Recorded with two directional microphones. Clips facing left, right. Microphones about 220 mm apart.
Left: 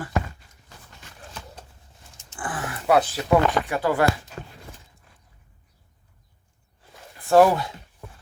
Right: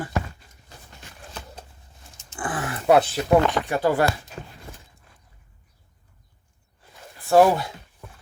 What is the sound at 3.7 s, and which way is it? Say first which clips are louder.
Speech: right 3 dB; 25° right (ahead or behind).